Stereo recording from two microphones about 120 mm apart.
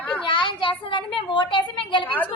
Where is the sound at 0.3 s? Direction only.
45° left (ahead or behind).